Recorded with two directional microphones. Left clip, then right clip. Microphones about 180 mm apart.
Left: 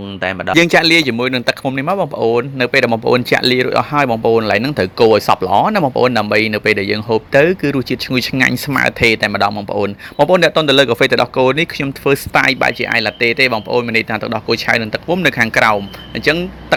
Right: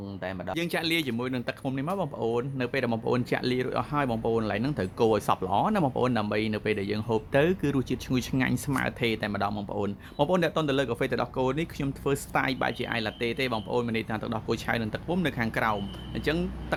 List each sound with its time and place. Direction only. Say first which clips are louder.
0.2 s speech: left 17 dB; 25° left (ahead or behind)
0.5 s speech: left 19 dB; 40° left (ahead or behind); by 16.4 s 20° left (ahead or behind)